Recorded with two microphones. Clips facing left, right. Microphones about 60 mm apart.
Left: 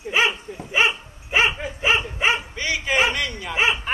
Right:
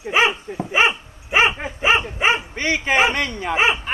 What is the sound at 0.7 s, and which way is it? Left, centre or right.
Dog, right.